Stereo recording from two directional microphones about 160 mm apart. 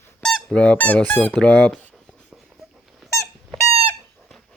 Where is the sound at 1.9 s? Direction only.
Centre (ahead or behind).